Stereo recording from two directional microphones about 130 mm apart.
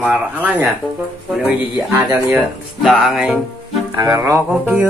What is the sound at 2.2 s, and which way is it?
Speech, 5° right (ahead or behind).